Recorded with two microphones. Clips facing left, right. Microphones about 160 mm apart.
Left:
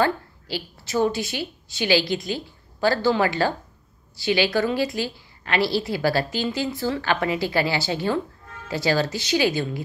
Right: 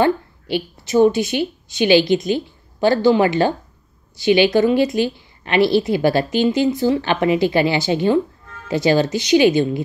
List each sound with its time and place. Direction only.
0.0 s a woman's voice: 20° right (ahead or behind)